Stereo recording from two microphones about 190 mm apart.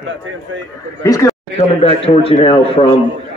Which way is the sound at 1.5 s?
30° left (ahead or behind).